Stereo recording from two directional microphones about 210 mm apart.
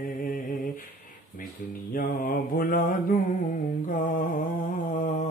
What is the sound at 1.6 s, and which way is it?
Mantra, 40° left (ahead or behind).